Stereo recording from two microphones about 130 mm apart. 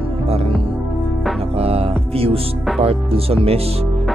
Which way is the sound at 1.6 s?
50° right (ahead or behind).